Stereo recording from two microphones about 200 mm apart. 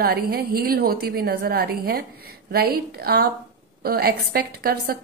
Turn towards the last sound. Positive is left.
turn(degrees=-50)  # may be behind; listen again after turning